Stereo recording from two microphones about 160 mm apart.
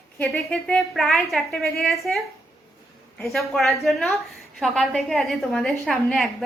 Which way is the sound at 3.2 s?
Centre (ahead or behind).